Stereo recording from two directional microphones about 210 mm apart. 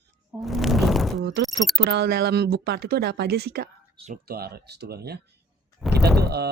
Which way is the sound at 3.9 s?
30° right (ahead or behind).